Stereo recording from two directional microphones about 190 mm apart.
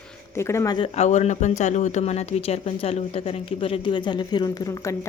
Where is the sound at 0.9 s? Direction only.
35° left (ahead or behind).